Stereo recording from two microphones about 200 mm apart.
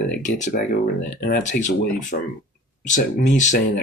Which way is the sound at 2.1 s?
50° left (ahead or behind).